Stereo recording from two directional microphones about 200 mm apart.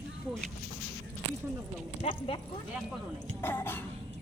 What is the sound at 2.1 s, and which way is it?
Speech, 25° left (ahead or behind).